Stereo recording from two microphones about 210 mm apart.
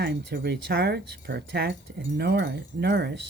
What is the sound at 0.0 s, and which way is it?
Speech, 50° right (ahead or behind).